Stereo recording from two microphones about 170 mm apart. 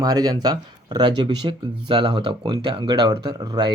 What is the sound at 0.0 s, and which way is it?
Speech, 20° right (ahead or behind).